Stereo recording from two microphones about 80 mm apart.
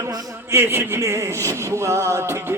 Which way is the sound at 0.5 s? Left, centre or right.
Right.